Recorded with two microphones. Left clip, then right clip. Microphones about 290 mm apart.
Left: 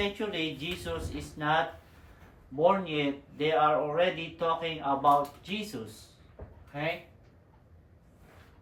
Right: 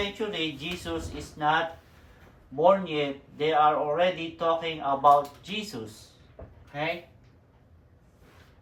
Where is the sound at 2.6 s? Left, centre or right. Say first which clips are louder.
Right 4 dB; centre.